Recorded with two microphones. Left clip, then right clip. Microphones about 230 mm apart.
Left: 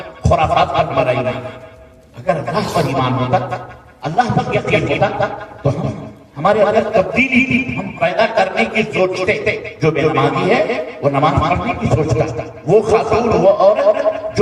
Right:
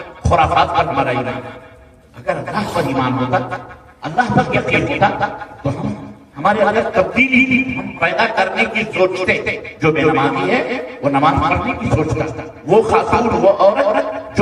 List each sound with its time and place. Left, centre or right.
0.3 s a man's voice: left
2.7 s a man's voice: left